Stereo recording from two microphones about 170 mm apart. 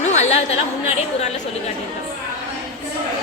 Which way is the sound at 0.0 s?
45° left (ahead or behind).